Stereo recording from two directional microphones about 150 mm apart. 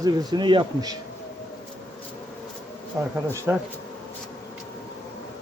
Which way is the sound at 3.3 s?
10° right (ahead or behind).